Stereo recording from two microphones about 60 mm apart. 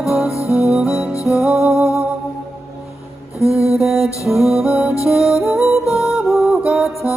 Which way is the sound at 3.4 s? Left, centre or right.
Left.